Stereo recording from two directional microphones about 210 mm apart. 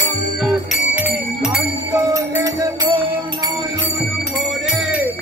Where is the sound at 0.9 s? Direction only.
5° right (ahead or behind).